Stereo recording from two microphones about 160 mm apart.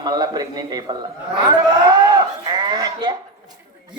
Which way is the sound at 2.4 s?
25° right (ahead or behind).